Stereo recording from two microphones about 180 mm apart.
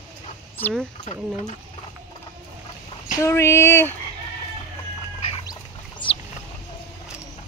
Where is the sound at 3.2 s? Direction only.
15° left (ahead or behind).